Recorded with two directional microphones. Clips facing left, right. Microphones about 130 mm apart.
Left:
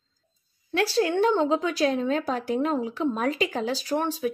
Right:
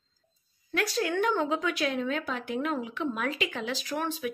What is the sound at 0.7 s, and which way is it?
Speech, 30° left (ahead or behind).